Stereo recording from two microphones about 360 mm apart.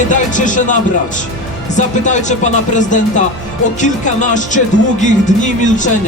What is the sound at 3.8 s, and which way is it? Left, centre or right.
Speech, left.